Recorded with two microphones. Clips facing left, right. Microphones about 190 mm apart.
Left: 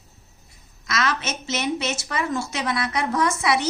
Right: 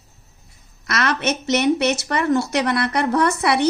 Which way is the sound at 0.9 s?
60° right (ahead or behind).